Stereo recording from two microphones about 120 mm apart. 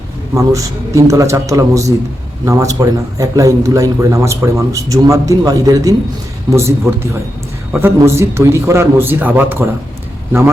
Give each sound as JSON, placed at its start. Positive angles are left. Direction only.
{"t": 0.3, "sound": "a man's voice", "side_deg": -25}